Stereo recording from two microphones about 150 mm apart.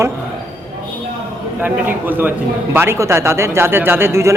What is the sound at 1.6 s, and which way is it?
A man's voice, 10° right (ahead or behind).